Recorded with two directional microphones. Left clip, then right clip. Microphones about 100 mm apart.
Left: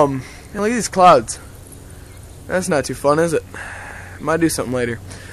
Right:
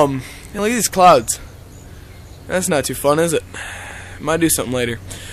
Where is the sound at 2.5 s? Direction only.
20° right (ahead or behind).